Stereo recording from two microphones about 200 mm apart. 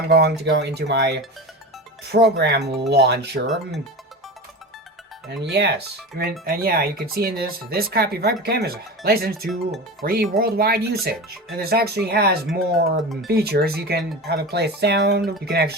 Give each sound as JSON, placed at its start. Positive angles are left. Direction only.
{"t": 0.1, "sound": "speech", "side_deg": -55}
{"t": 5.3, "sound": "speech", "side_deg": -55}